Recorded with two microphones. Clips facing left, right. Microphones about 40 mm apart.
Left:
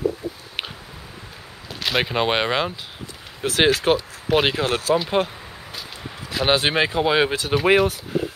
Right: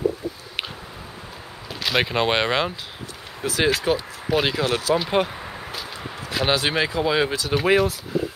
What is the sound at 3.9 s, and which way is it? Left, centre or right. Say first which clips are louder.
Speech: left 3 dB; left.